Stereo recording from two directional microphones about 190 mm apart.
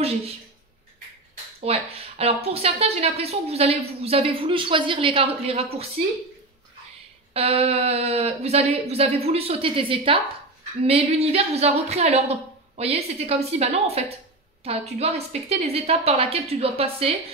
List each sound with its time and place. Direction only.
1.3 s a woman's voice: 30° right (ahead or behind)
7.3 s a woman's voice: 30° right (ahead or behind)